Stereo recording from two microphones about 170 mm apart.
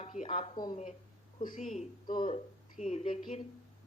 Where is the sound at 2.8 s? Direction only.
40° left (ahead or behind).